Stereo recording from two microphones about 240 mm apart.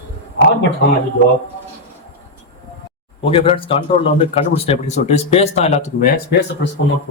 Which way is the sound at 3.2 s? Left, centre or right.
Left.